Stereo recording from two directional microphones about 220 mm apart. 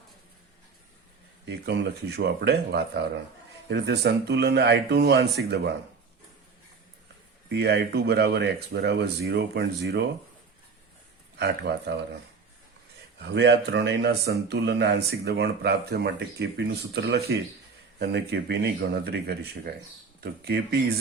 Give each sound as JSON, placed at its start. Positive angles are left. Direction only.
{"t": 1.5, "sound": "speech", "side_deg": -50}
{"t": 7.5, "sound": "speech", "side_deg": -50}
{"t": 11.3, "sound": "speech", "side_deg": -50}
{"t": 13.2, "sound": "speech", "side_deg": -50}